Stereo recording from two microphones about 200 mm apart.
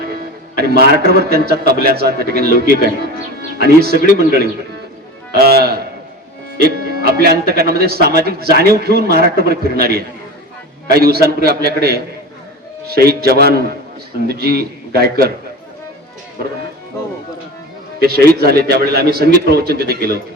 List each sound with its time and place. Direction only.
0.8 s speech: 50° right (ahead or behind)
13.1 s speech: 50° right (ahead or behind)
18.0 s speech: 50° right (ahead or behind)